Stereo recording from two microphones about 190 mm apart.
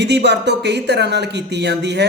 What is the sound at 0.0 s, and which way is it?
Speech, 65° right (ahead or behind).